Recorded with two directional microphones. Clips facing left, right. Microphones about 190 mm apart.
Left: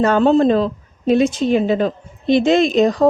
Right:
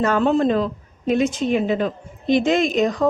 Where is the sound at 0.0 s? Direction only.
30° left (ahead or behind).